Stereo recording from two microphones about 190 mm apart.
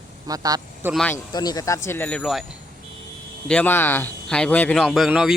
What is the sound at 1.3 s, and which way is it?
Speech, 20° left (ahead or behind).